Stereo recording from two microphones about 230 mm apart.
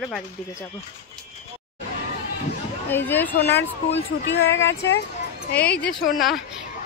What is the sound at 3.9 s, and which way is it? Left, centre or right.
Speech, left.